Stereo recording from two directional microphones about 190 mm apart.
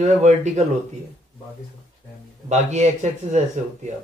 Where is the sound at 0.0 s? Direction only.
35° right (ahead or behind).